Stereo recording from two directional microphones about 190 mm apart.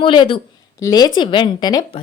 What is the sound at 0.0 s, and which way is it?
Speech, 25° left (ahead or behind).